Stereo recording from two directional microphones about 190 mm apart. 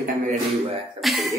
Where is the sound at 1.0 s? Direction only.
Centre (ahead or behind).